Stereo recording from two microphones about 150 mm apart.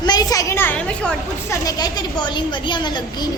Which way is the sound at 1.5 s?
25° left (ahead or behind).